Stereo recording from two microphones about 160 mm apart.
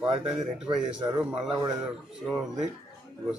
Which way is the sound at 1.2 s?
10° right (ahead or behind).